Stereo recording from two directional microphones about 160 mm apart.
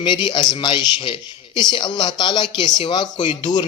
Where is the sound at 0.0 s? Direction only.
30° left (ahead or behind).